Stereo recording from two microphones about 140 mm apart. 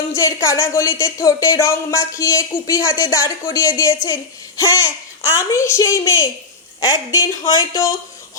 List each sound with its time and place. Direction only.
0.1 s speech: 20° left (ahead or behind)